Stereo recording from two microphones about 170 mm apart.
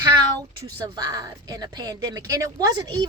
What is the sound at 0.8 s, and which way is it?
Speech, 25° right (ahead or behind).